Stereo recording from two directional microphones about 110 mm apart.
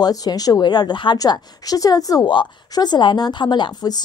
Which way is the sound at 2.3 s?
45° left (ahead or behind).